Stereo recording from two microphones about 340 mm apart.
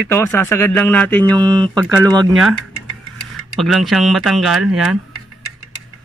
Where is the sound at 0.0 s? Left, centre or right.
Centre.